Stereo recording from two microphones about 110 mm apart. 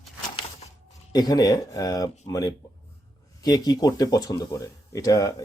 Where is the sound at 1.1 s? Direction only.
35° left (ahead or behind).